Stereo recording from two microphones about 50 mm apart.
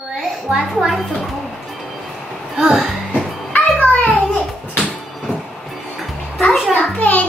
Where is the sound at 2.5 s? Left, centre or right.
Centre.